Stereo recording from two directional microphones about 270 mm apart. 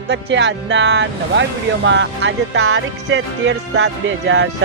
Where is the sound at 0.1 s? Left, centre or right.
Right.